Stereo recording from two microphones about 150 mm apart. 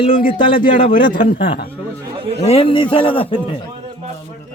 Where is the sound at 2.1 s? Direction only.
40° right (ahead or behind).